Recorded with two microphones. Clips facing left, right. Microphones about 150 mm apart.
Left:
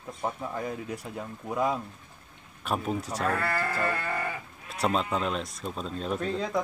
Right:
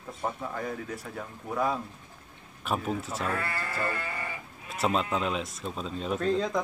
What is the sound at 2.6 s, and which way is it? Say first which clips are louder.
Speech: left 1 dB; centre (ahead or behind).